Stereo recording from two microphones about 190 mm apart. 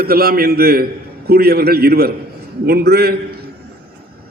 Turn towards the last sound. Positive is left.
turn(degrees=-55)  # may be behind; listen again after turning